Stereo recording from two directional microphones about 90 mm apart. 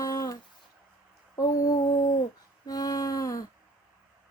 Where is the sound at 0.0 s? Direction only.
40° left (ahead or behind).